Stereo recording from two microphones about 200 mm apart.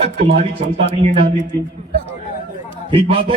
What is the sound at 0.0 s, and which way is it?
Speech, 55° right (ahead or behind).